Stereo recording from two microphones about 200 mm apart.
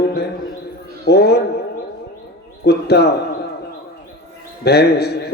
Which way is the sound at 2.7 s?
55° left (ahead or behind).